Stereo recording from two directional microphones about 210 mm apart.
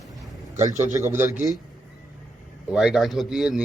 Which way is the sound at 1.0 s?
10° right (ahead or behind).